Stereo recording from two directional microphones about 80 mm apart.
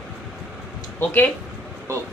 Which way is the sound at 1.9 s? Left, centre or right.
Right.